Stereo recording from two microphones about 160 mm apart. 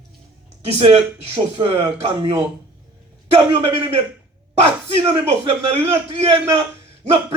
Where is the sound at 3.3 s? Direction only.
40° right (ahead or behind).